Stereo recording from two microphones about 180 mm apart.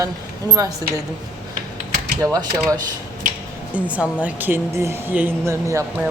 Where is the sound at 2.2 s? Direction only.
20° right (ahead or behind).